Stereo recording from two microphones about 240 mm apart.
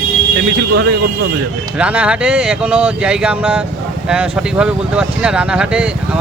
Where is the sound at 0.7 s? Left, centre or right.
Right.